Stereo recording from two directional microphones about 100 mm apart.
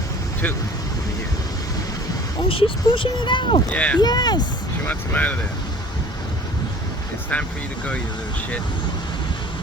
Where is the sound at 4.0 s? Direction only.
45° left (ahead or behind).